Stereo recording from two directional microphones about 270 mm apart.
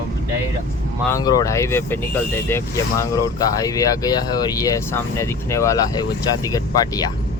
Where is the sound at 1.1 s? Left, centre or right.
Centre.